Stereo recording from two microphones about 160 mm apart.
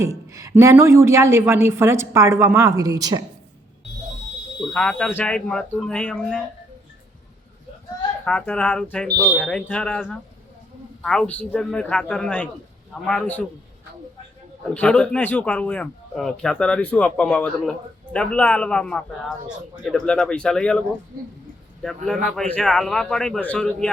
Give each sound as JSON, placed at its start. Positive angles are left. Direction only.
{"t": 0.0, "sound": "a sound", "side_deg": -20}
{"t": 0.5, "sound": "a woman's voice", "side_deg": -15}
{"t": 4.7, "sound": "speech", "side_deg": 5}
{"t": 8.2, "sound": "speech", "side_deg": 5}
{"t": 14.7, "sound": "a man's voice", "side_deg": 5}